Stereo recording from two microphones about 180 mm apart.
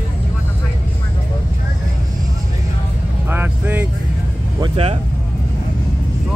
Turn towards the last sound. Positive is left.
turn(degrees=-30)  # may be behind; listen again after turning